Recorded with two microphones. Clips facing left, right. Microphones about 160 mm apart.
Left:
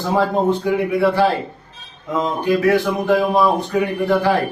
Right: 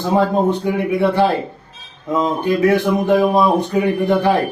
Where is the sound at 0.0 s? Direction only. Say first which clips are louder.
Right 2 dB; 20° right (ahead or behind).